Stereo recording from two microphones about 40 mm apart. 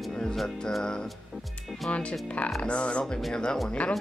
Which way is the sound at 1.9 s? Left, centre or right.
Left.